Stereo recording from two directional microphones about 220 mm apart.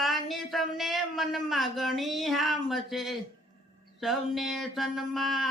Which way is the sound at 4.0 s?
Centre (ahead or behind).